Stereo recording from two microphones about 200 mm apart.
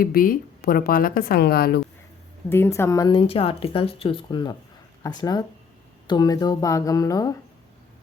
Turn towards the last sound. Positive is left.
turn(degrees=15)  # may be behind; listen again after turning